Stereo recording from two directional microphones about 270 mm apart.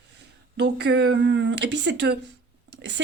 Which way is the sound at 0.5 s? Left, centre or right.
Right.